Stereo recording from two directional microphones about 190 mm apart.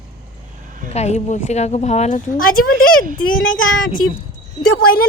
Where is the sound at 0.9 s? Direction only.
35° left (ahead or behind).